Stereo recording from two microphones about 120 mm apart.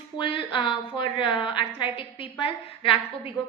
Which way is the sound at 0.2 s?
45° left (ahead or behind).